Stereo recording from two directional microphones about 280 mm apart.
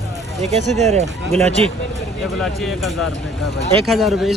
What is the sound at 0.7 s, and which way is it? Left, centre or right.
Speech, right.